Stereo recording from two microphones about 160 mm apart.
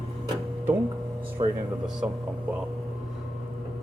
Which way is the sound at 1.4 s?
30° right (ahead or behind).